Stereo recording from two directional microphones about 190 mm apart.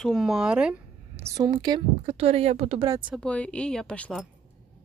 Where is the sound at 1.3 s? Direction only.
20° right (ahead or behind).